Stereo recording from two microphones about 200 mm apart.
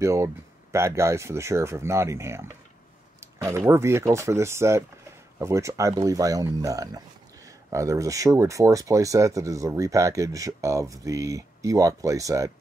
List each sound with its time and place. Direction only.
0.0 s speech: 15° right (ahead or behind)